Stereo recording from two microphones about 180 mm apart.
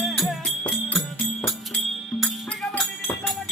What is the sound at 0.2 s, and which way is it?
Music, centre (ahead or behind).